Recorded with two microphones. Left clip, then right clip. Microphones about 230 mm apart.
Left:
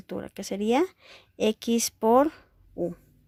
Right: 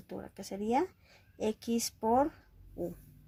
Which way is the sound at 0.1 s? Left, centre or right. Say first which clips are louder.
Left 9 dB; left.